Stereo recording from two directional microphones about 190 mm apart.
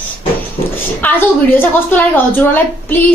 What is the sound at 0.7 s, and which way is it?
A woman's voice, 10° left (ahead or behind).